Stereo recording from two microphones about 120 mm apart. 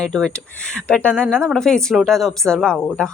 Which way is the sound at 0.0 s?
5° left (ahead or behind).